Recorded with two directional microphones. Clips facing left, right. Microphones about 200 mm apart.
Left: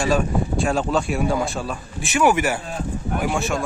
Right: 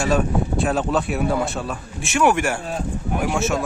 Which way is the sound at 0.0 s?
Centre (ahead or behind).